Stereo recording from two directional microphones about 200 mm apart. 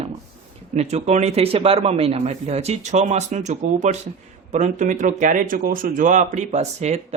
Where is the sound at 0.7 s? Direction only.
35° right (ahead or behind).